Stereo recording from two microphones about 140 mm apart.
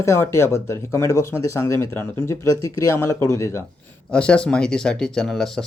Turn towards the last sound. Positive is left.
turn(degrees=5)  # may be behind; listen again after turning